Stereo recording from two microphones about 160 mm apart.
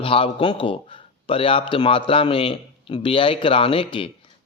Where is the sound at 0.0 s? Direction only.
35° left (ahead or behind).